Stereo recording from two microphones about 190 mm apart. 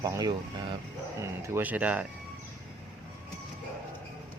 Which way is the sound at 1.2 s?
10° right (ahead or behind).